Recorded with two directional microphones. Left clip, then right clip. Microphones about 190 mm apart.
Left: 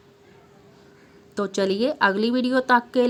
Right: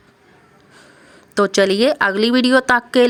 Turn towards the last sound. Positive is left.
turn(degrees=-25)  # may be behind; listen again after turning